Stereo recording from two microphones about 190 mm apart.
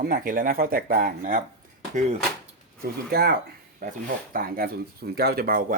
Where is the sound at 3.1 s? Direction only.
55° right (ahead or behind).